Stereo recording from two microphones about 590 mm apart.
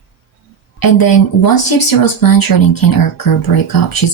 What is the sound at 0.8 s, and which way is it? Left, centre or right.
Speech, left.